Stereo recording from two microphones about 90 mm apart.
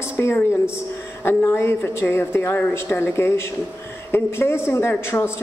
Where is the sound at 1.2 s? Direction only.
30° left (ahead or behind).